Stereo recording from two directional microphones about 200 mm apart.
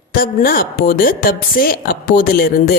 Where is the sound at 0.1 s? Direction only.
45° left (ahead or behind).